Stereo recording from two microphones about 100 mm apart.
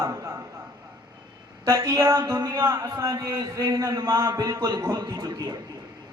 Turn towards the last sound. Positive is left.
turn(degrees=-40)  # may be behind; listen again after turning